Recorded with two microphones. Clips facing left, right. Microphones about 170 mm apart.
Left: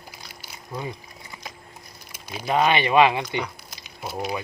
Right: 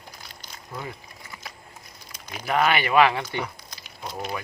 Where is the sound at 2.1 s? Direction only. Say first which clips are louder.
Left 3 dB; 10° left (ahead or behind).